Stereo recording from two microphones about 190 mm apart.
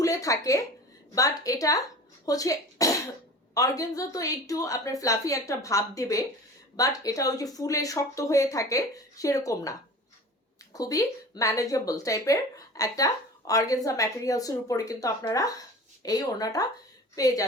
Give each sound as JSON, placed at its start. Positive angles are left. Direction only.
{"t": 0.0, "sound": "speech", "side_deg": 15}